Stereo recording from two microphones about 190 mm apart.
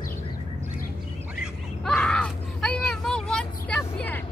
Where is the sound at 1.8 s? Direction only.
5° left (ahead or behind).